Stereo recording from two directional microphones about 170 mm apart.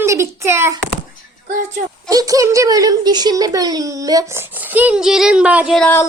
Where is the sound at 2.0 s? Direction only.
20° right (ahead or behind); by 5.9 s centre (ahead or behind).